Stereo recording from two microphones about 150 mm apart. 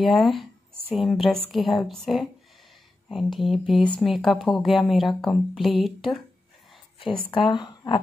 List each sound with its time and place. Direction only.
0.0 s speech: centre (ahead or behind)
7.3 s speech: 30° left (ahead or behind)